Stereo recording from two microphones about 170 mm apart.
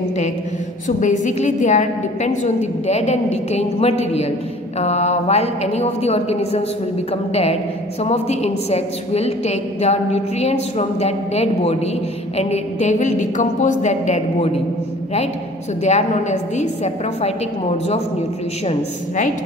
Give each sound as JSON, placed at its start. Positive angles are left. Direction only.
{"t": 0.8, "sound": "a woman's voice", "side_deg": 45}
{"t": 8.0, "sound": "a woman's voice", "side_deg": 40}
{"t": 15.8, "sound": "a woman's voice", "side_deg": 40}